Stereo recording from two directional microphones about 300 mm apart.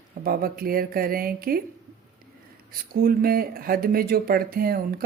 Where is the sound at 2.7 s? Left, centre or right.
Right.